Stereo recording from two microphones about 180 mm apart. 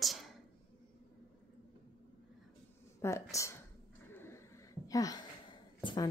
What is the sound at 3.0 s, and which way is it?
Speech, 15° left (ahead or behind).